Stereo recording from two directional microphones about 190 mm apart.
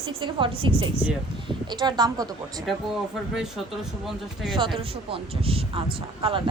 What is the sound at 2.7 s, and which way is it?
Speech, centre (ahead or behind).